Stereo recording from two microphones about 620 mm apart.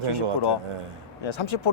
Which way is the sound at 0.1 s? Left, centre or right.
Left.